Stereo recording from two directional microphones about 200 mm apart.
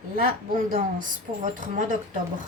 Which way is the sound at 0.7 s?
40° right (ahead or behind).